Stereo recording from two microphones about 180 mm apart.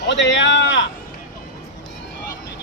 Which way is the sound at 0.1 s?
90° left.